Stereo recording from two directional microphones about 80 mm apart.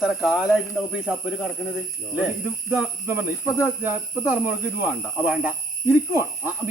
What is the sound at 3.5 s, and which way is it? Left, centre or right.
Speech, right.